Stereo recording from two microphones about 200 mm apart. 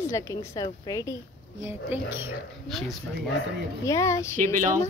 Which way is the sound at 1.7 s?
10° right (ahead or behind).